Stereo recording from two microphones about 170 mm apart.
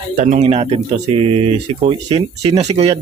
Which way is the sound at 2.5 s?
40° right (ahead or behind).